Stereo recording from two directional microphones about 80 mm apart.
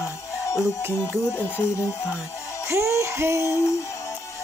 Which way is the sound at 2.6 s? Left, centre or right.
Right.